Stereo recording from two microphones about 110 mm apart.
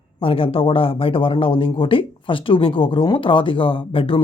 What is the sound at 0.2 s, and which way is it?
A woman's voice, 55° left (ahead or behind).